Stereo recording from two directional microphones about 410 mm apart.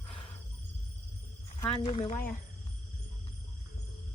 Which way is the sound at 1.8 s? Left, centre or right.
Centre.